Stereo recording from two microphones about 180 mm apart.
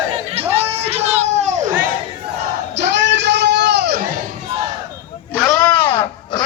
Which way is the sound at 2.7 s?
80° right.